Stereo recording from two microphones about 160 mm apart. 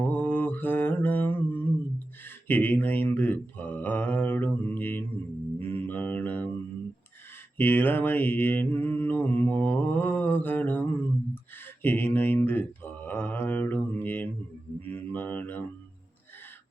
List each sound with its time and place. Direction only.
0.0 s mantra: 10° left (ahead or behind)
5.5 s music: 15° left (ahead or behind)
7.6 s mantra: 10° left (ahead or behind)
11.8 s speech: 10° left (ahead or behind)
13.1 s mantra: 10° left (ahead or behind)